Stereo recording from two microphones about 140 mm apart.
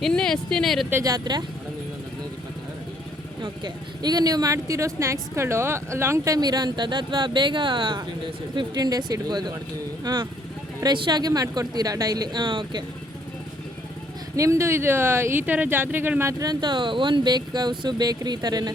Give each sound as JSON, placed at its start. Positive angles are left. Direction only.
{"t": 0.0, "sound": "speech", "side_deg": 5}
{"t": 0.9, "sound": "speech", "side_deg": -20}
{"t": 3.4, "sound": "speech", "side_deg": -30}
{"t": 14.3, "sound": "speech", "side_deg": -20}